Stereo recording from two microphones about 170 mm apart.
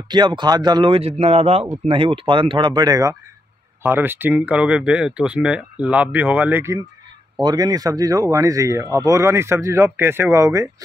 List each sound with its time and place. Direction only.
0.1 s speech: 25° right (ahead or behind)